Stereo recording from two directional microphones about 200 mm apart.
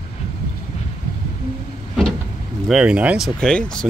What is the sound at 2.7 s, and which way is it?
Speech, 5° right (ahead or behind).